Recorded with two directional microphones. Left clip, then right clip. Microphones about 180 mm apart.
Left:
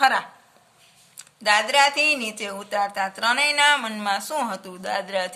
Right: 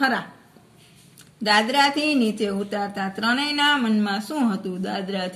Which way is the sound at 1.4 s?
50° left (ahead or behind).